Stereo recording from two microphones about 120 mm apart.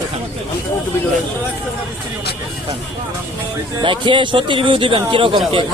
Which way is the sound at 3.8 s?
45° right (ahead or behind).